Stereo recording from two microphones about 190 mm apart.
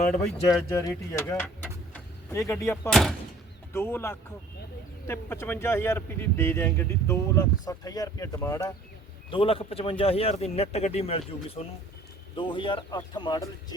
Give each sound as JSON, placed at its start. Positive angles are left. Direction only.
{"t": 0.4, "sound": "speech", "side_deg": 20}
{"t": 2.9, "sound": "speech", "side_deg": 0}
{"t": 3.7, "sound": "speech", "side_deg": 10}
{"t": 9.3, "sound": "speech", "side_deg": 30}